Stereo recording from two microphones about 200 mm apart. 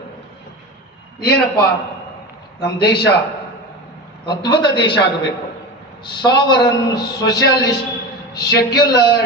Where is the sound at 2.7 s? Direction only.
55° left (ahead or behind).